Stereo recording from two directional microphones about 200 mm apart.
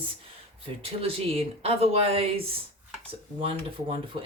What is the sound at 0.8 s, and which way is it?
Speech, 30° right (ahead or behind).